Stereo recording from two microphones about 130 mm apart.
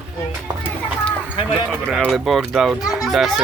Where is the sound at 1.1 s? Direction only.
40° left (ahead or behind).